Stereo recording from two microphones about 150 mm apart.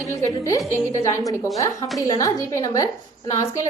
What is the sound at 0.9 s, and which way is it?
A woman's voice, 20° left (ahead or behind).